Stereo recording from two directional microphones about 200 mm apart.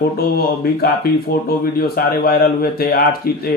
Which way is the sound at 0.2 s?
50° left (ahead or behind).